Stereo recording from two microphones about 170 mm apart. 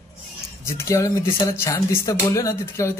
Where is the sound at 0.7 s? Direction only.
15° left (ahead or behind).